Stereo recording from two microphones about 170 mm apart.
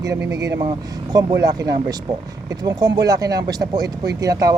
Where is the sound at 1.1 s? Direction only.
25° right (ahead or behind).